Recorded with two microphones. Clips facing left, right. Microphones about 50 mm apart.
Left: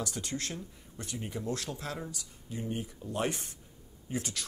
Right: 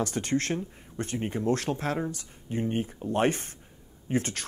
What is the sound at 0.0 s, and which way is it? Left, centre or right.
Speech, right.